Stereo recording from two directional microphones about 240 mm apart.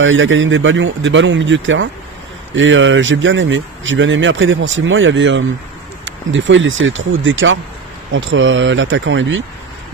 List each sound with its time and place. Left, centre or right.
0.0 s speech: right